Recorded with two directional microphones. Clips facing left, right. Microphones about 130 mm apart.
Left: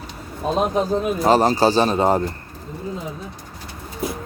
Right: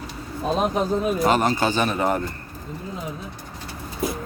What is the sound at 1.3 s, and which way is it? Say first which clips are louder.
Speech: left 9 dB; 35° left (ahead or behind).